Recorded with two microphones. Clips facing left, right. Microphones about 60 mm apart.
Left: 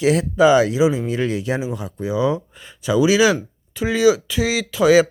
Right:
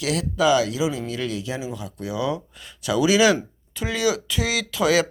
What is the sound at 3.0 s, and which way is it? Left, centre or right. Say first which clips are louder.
Speech: even; centre.